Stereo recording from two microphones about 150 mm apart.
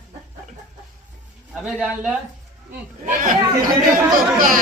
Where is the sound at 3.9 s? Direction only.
70° right (ahead or behind).